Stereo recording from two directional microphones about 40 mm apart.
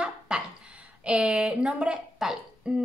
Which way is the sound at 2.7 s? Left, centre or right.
Centre.